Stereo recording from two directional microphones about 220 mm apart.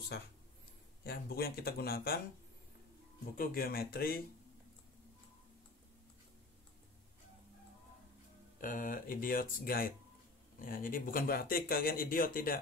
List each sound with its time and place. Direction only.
1.0 s speech: 45° left (ahead or behind)
3.3 s speech: 40° left (ahead or behind)
8.5 s speech: 40° left (ahead or behind)